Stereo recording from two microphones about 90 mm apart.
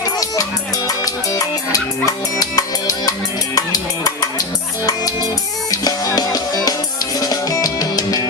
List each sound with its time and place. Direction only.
0.0 s music: 45° left (ahead or behind)
5.7 s music: 40° left (ahead or behind)